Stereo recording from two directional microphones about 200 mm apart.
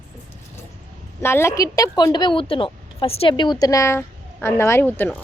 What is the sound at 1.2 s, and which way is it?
A woman's voice, 10° left (ahead or behind).